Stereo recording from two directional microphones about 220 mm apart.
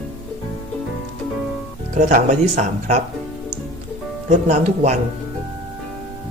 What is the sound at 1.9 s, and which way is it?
Speech, 35° right (ahead or behind).